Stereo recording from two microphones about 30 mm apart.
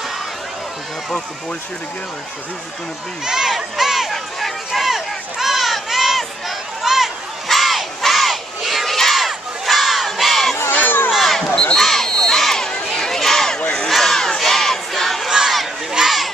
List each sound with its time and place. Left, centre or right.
3.3 s speech: centre
3.5 s crowd: centre
4.1 s run: centre
4.9 s a sound: centre
7.4 s battle cry: centre
8.0 s crowd: centre
8.8 s battle cry: centre
10.7 s crowd: left
11.2 s basketball bounce: centre
11.7 s a sound: centre
13.8 s battle cry: centre
14.1 s battle cry: centre
15.2 s crowd: centre
16.0 s a sound: right